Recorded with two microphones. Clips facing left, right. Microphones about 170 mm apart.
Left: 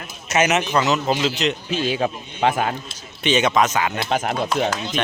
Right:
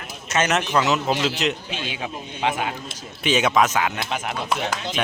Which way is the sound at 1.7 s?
40° left (ahead or behind).